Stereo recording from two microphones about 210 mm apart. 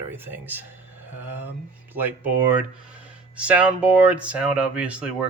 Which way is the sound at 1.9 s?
10° right (ahead or behind).